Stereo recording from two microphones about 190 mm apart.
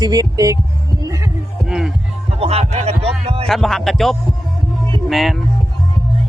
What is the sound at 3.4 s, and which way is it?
Speech, centre (ahead or behind).